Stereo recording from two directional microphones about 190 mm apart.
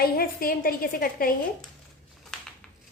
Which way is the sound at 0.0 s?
50° left (ahead or behind).